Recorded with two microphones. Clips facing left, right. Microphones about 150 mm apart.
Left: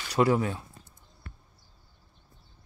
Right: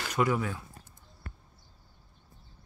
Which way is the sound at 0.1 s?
30° left (ahead or behind).